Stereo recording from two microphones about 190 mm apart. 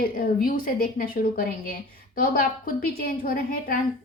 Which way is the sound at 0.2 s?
50° left (ahead or behind).